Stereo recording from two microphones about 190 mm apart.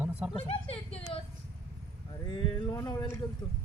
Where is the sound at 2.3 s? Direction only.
20° left (ahead or behind).